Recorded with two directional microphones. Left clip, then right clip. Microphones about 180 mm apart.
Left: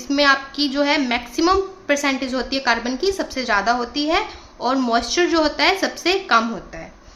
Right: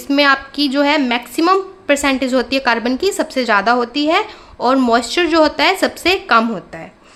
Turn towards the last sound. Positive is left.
turn(degrees=-45)  # may be behind; listen again after turning